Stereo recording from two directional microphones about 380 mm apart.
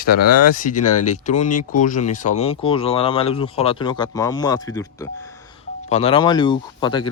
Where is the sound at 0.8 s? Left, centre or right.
Left.